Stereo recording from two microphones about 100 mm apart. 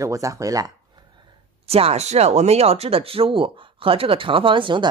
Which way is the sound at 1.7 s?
85° right.